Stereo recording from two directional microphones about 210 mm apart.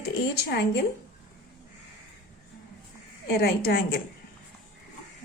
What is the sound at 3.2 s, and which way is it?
Speech, 50° left (ahead or behind).